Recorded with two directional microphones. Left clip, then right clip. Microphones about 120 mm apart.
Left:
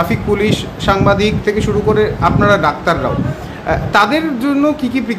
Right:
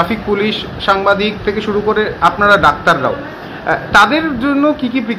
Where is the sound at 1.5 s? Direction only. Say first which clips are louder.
Left 1 dB; 25° left (ahead or behind).